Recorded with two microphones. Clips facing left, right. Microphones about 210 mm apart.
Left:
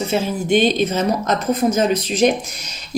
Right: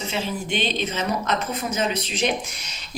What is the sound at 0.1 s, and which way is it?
A woman's voice, 45° left (ahead or behind).